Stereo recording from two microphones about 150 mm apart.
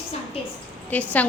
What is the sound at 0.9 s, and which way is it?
Speech, 10° left (ahead or behind).